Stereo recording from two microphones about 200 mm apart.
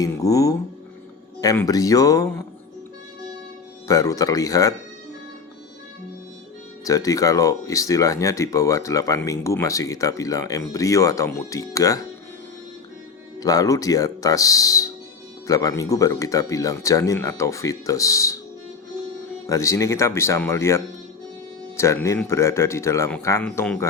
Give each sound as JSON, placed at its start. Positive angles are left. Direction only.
{"t": 0.0, "sound": "speech", "side_deg": 15}
{"t": 3.8, "sound": "speech", "side_deg": 15}
{"t": 6.8, "sound": "speech", "side_deg": 15}
{"t": 13.4, "sound": "speech", "side_deg": 15}
{"t": 19.5, "sound": "speech", "side_deg": 15}